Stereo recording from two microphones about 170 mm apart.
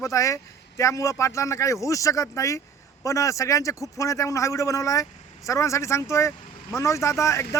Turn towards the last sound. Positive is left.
turn(degrees=15)  # may be behind; listen again after turning